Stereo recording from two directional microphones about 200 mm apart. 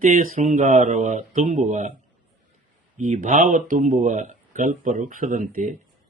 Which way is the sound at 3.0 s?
40° right (ahead or behind).